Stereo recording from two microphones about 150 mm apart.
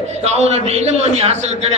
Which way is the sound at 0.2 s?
45° right (ahead or behind).